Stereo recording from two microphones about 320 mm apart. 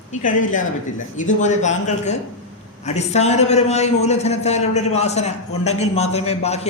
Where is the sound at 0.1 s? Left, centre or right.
Left.